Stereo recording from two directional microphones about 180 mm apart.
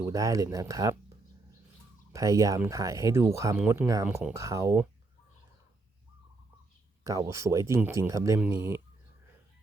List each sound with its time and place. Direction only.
0.0 s speech: 20° right (ahead or behind)
2.1 s speech: 20° right (ahead or behind)
7.0 s speech: 15° right (ahead or behind)